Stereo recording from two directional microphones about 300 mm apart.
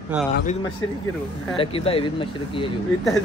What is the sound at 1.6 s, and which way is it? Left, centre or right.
Speech, centre.